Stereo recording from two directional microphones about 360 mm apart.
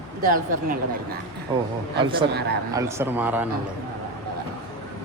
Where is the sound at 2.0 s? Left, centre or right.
Centre.